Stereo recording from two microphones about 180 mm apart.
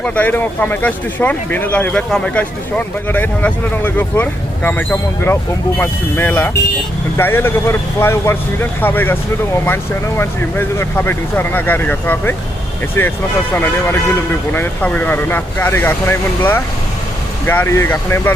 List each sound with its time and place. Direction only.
0.0 s speech: 10° left (ahead or behind)